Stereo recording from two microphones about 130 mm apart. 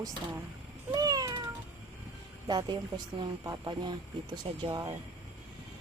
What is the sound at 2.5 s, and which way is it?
Speech, 35° right (ahead or behind).